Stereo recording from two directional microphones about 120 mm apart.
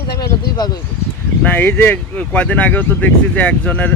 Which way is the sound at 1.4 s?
15° left (ahead or behind).